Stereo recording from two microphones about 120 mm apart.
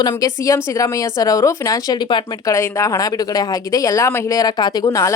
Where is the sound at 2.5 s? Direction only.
25° left (ahead or behind).